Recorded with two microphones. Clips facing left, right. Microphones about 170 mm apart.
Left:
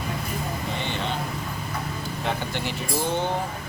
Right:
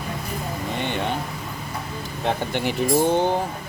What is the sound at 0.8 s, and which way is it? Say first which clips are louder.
Vehicle: right 7 dB; 55° right (ahead or behind).